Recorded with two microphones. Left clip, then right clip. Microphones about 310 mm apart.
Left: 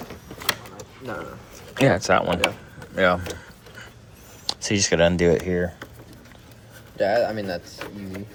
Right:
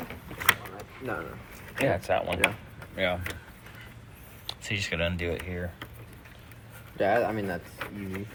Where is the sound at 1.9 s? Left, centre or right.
Left.